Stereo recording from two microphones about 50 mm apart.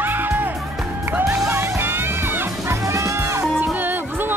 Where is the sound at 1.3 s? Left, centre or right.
Right.